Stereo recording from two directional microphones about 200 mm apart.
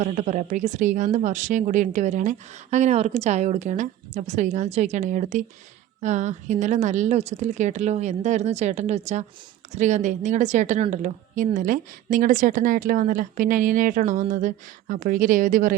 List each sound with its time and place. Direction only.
0.0 s a woman's voice: 35° right (ahead or behind)